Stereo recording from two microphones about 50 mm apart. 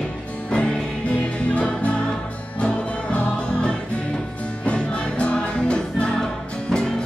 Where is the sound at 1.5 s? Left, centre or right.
Left.